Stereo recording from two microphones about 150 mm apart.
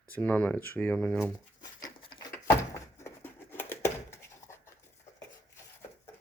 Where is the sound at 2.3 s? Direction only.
20° left (ahead or behind).